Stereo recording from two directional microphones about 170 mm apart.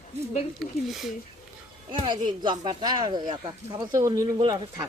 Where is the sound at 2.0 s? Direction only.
30° right (ahead or behind).